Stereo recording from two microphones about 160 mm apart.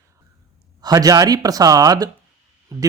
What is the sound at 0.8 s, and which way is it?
A man's voice, 20° right (ahead or behind).